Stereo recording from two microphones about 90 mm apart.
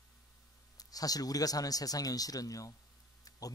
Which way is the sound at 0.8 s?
45° left (ahead or behind).